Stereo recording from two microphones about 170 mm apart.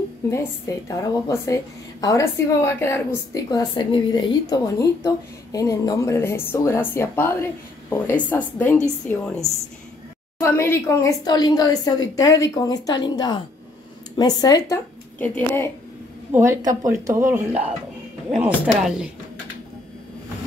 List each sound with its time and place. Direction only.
0.3 s a woman's voice: 15° left (ahead or behind)
15.1 s a woman's voice: 10° left (ahead or behind)
16.3 s a woman's voice: 15° right (ahead or behind)